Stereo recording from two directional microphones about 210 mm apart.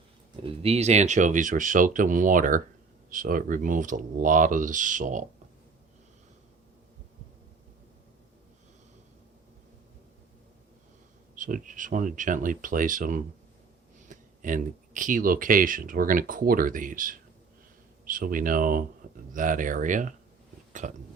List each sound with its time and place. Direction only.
0.4 s speech: 30° right (ahead or behind)
11.3 s speech: 40° right (ahead or behind)